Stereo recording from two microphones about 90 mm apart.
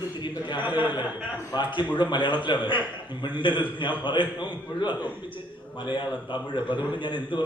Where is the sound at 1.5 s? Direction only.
50° left (ahead or behind).